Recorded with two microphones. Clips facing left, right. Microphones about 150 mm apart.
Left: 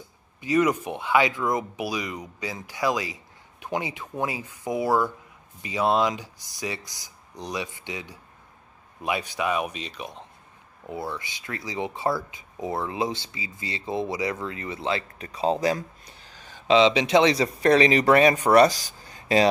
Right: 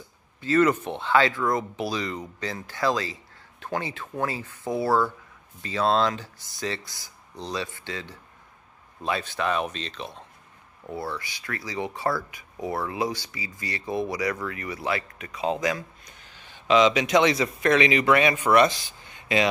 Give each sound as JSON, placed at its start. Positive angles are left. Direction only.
{"t": 0.4, "sound": "speech", "side_deg": 15}